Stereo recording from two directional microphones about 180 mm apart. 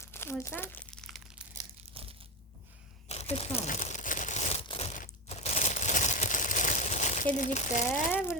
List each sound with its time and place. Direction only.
0.0 s crumpling: 15° left (ahead or behind)
2.0 s crushing: 30° right (ahead or behind)
3.1 s crumpling: 35° left (ahead or behind)
7.3 s speech: 45° left (ahead or behind)
7.9 s speech: 15° left (ahead or behind)